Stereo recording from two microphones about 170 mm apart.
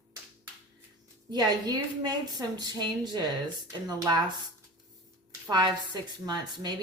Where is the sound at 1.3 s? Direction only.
25° right (ahead or behind).